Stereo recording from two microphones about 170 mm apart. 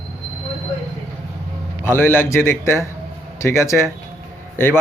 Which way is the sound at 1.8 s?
15° left (ahead or behind).